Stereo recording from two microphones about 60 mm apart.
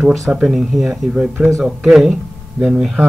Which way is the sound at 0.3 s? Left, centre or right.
Centre.